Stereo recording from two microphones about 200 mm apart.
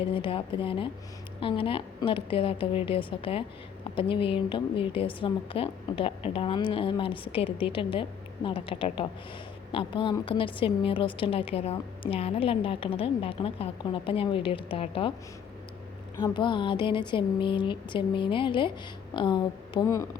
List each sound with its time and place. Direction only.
0.0 s a woman's voice: 25° left (ahead or behind)
16.1 s a woman's voice: 20° left (ahead or behind)